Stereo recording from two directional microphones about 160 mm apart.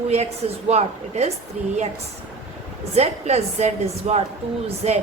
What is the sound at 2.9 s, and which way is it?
A woman's voice, 40° right (ahead or behind).